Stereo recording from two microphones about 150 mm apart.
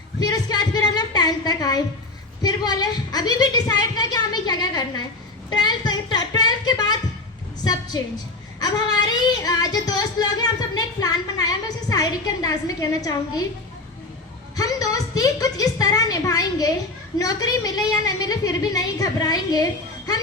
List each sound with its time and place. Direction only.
0.2 s a sound: 25° left (ahead or behind)
2.4 s child singing: 25° left (ahead or behind)
5.5 s a woman's voice: 30° left (ahead or behind)
8.6 s child singing: 25° left (ahead or behind)
14.5 s child singing: 25° left (ahead or behind)